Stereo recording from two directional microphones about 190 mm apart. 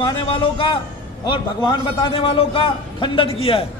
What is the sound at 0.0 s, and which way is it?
A man's voice, 25° left (ahead or behind).